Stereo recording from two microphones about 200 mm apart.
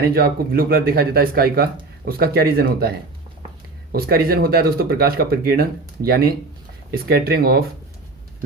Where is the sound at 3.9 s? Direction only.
50° right (ahead or behind).